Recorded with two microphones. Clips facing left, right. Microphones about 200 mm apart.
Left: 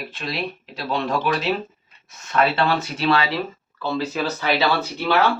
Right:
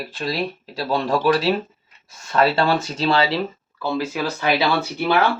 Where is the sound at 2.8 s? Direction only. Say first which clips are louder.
Right 1 dB; 25° right (ahead or behind).